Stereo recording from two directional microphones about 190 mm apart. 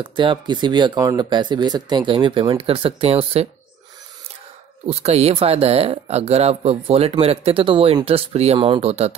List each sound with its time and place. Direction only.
0.0 s speech: 25° right (ahead or behind)
4.8 s speech: 30° right (ahead or behind)